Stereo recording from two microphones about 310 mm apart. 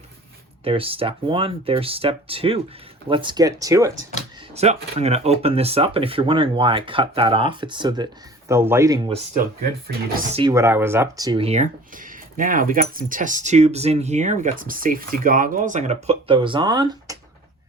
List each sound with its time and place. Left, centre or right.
0.6 s speech: centre
4.5 s speech: right
10.3 s speech: centre